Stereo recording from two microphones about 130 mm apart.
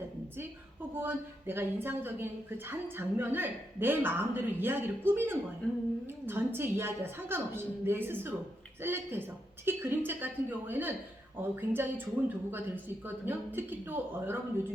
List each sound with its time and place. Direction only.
0.9 s speech: 15° right (ahead or behind)
5.6 s humming: 5° left (ahead or behind)
6.1 s speech: 15° right (ahead or behind)